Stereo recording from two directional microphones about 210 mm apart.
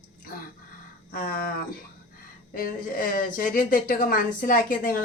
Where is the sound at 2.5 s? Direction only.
45° left (ahead or behind).